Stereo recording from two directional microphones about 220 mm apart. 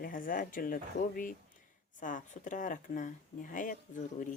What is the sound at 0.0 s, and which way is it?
Speech, 40° left (ahead or behind).